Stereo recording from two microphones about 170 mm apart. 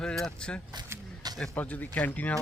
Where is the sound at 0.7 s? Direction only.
25° right (ahead or behind).